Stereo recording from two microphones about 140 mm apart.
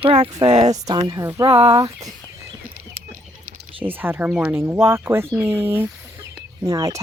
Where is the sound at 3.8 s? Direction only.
15° right (ahead or behind).